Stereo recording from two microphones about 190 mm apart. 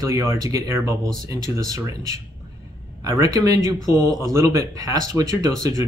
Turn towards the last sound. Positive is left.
turn(degrees=-20)  # may be behind; listen again after turning